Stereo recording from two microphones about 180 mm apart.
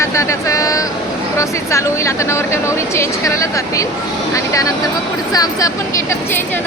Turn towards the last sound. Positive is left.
turn(degrees=20)  # may be behind; listen again after turning